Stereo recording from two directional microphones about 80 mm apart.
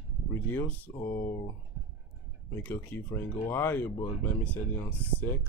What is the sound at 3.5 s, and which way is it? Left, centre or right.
Speech, left.